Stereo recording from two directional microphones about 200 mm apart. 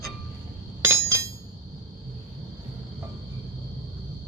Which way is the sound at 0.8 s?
15° right (ahead or behind).